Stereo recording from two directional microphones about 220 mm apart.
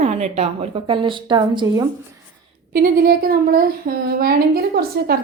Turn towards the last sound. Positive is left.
turn(degrees=-45)  # may be behind; listen again after turning